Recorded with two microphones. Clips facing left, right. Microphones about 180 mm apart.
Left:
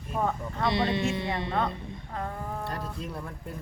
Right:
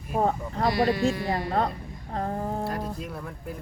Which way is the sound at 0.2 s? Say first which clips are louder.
Right 4 dB; 35° right (ahead or behind).